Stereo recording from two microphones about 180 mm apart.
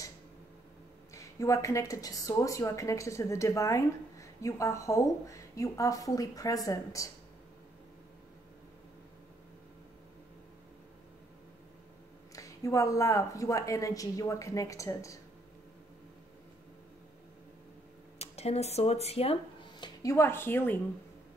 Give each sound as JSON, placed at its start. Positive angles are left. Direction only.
{"t": 1.1, "sound": "speech", "side_deg": 15}
{"t": 12.4, "sound": "speech", "side_deg": 15}
{"t": 18.2, "sound": "speech", "side_deg": 35}
{"t": 19.8, "sound": "speech", "side_deg": 20}